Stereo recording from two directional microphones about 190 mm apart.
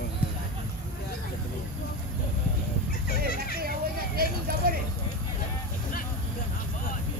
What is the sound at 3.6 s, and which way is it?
Vehicle, 50° right (ahead or behind).